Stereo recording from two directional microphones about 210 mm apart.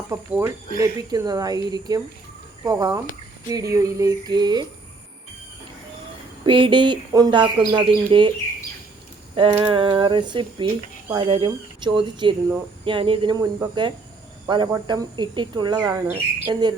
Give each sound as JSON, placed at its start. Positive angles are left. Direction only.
{"t": 0.1, "sound": "speech", "side_deg": -10}
{"t": 6.4, "sound": "speech", "side_deg": -25}
{"t": 9.3, "sound": "speech", "side_deg": -25}